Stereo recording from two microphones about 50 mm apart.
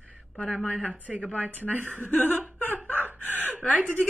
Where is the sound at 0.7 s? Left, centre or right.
Right.